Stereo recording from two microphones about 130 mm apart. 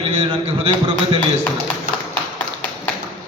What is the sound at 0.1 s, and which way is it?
Speech, 50° right (ahead or behind).